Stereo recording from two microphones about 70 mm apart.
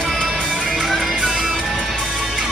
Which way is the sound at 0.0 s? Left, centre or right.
Centre.